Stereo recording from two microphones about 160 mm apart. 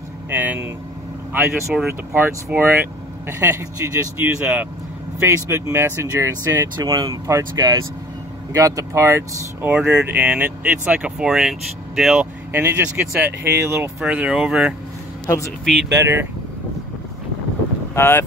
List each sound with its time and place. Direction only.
0.3 s speech: 10° right (ahead or behind)
15.2 s speech: 20° left (ahead or behind)
15.6 s speech: centre (ahead or behind)
15.9 s speech: 15° right (ahead or behind)
17.9 s speech: 15° left (ahead or behind)